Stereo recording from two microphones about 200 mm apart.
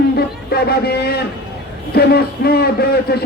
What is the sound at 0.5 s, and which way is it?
A man's voice, 50° left (ahead or behind).